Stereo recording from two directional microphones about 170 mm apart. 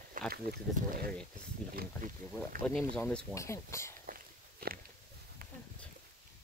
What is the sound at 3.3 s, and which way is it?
Speech, 15° left (ahead or behind).